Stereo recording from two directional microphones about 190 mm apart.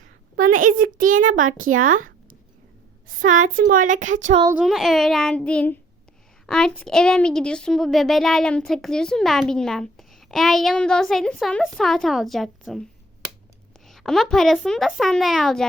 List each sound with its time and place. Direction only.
0.3 s a child's voice: 45° right (ahead or behind)
3.5 s speech: 45° right (ahead or behind)
4.5 s a woman's voice: centre (ahead or behind)